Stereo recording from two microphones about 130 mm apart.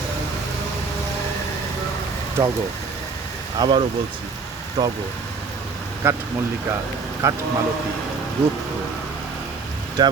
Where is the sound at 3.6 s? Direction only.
30° right (ahead or behind).